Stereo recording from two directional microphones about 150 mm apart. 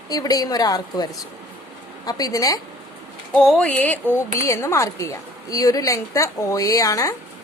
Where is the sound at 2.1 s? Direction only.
25° left (ahead or behind).